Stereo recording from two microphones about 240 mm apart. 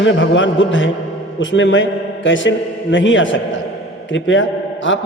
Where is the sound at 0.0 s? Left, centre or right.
Left.